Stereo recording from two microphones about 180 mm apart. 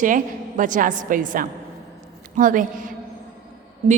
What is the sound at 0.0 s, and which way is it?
A woman's voice, 45° right (ahead or behind).